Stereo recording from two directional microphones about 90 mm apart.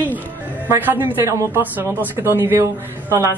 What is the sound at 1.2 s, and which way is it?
Speech, 35° right (ahead or behind).